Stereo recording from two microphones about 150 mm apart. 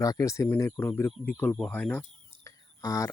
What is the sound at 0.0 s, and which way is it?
Speech, 20° left (ahead or behind).